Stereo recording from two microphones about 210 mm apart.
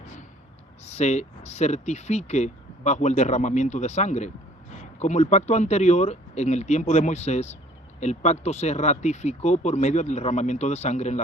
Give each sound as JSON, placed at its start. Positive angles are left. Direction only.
{"t": 0.9, "sound": "speech", "side_deg": 35}